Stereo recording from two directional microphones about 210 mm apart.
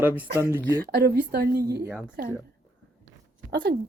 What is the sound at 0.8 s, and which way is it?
Speech, 50° right (ahead or behind).